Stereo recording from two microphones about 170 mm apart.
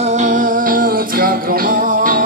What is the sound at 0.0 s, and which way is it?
Music, 45° right (ahead or behind).